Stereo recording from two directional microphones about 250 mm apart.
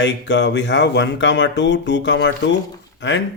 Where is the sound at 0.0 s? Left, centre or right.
Left.